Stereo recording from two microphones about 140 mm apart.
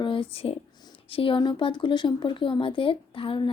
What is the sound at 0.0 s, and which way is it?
Speech, 40° left (ahead or behind).